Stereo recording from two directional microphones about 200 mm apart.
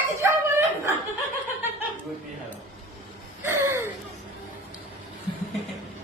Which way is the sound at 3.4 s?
15° right (ahead or behind).